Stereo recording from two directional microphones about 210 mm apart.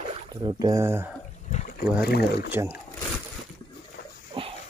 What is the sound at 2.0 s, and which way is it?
Speech, 50° left (ahead or behind).